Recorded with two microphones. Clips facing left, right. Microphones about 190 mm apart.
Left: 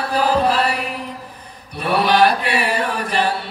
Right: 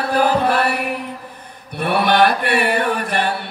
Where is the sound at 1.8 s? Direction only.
60° right (ahead or behind).